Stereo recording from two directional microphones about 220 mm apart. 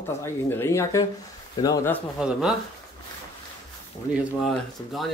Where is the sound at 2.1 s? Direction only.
Centre (ahead or behind).